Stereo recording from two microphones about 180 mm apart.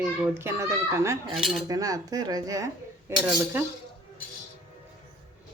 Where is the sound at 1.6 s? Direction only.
20° right (ahead or behind).